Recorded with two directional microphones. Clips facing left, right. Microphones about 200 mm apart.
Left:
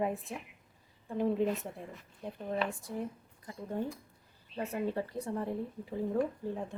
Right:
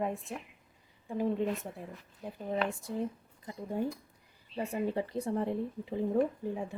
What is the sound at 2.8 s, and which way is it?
Speech, 25° right (ahead or behind).